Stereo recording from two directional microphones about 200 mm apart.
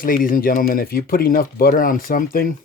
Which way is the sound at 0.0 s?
45° left (ahead or behind).